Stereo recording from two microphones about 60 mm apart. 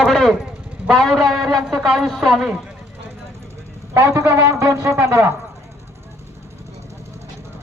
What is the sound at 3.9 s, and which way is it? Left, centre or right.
A man's voice, right.